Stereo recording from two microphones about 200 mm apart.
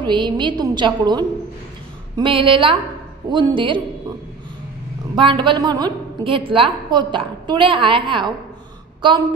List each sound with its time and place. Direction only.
0.0 s a woman's voice: 25° right (ahead or behind)
5.1 s a woman's voice: 25° right (ahead or behind)